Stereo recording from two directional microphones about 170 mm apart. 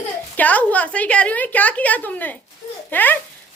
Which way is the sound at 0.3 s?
10° left (ahead or behind).